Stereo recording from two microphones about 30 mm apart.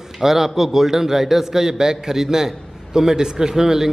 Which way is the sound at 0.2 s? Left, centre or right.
Centre.